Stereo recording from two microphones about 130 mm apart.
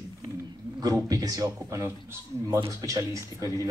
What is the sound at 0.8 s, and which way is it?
Speech, 30° right (ahead or behind).